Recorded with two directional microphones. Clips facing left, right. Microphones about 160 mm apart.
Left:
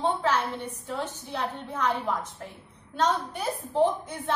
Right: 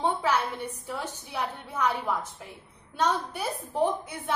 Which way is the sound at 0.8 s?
10° right (ahead or behind).